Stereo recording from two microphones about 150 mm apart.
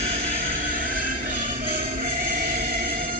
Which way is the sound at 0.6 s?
70° right (ahead or behind).